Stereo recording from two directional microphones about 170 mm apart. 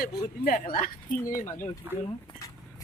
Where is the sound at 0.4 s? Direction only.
55° left (ahead or behind).